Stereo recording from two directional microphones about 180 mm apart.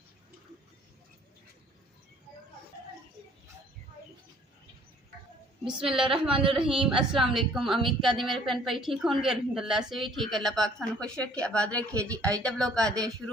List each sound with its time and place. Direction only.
5.6 s a woman's voice: 5° right (ahead or behind)
6.3 s speech: 30° right (ahead or behind)
6.6 s a woman's voice: 5° right (ahead or behind)